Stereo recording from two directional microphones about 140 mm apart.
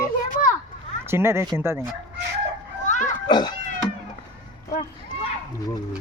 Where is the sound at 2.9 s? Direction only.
65° left (ahead or behind).